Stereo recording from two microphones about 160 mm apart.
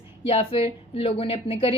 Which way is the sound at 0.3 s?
35° left (ahead or behind).